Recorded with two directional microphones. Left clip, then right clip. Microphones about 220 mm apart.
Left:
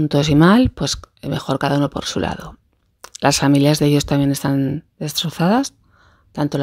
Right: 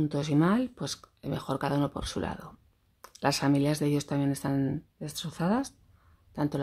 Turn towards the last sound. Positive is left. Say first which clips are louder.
# left 10 dB
turn(degrees=35)  # may be behind; listen again after turning